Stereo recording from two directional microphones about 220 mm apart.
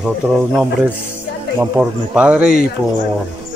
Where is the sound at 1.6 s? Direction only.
5° right (ahead or behind).